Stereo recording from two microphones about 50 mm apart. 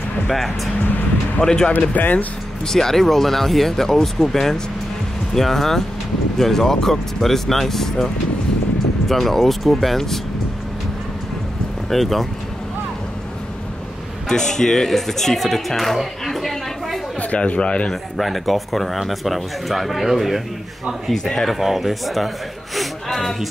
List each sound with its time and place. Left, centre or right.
1.4 s speech: centre
1.7 s speech: left
2.6 s speech: centre
9.1 s speech: centre
11.9 s speech: centre
14.3 s speech: centre
17.2 s speech: left
18.1 s speech: centre
21.1 s speech: centre